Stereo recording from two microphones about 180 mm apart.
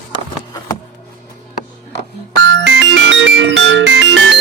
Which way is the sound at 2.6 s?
90° right.